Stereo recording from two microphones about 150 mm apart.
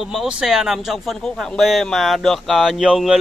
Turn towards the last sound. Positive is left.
turn(degrees=-5)  # may be behind; listen again after turning